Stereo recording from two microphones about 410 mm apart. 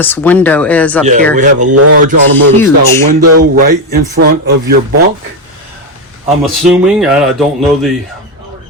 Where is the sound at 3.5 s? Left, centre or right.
Right.